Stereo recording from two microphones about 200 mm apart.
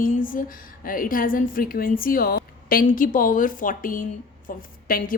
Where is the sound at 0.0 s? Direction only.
45° left (ahead or behind).